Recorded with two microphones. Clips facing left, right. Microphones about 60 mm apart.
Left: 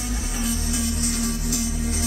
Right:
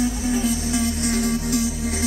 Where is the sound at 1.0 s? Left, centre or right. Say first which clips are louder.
Right 5 dB; right.